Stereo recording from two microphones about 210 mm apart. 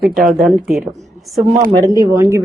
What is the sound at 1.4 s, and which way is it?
Speech, 35° right (ahead or behind).